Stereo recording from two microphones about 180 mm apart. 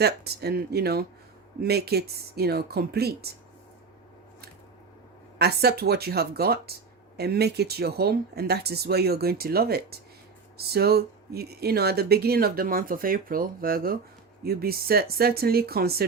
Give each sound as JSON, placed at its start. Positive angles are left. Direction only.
{"t": 0.0, "sound": "speech", "side_deg": -65}
{"t": 5.4, "sound": "speech", "side_deg": -60}